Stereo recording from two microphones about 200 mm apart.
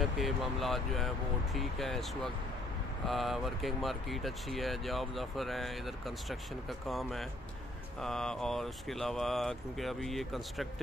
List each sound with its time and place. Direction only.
0.0 s speech: centre (ahead or behind)